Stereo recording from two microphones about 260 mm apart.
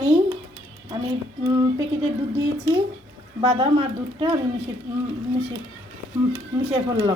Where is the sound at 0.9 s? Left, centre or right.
Centre.